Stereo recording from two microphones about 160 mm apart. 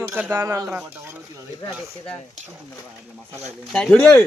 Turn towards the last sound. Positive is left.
turn(degrees=5)  # may be behind; listen again after turning